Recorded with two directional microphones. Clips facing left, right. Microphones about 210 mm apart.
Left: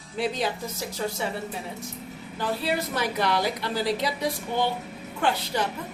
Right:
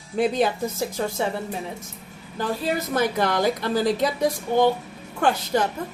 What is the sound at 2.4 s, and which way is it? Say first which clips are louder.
A woman's voice: right 2 dB; 45° right (ahead or behind).